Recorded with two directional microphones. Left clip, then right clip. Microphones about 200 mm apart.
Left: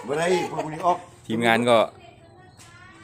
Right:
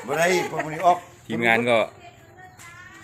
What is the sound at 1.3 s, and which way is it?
Speech, 20° left (ahead or behind).